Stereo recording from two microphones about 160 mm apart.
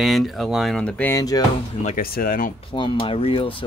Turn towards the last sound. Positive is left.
turn(degrees=35)  # may be behind; listen again after turning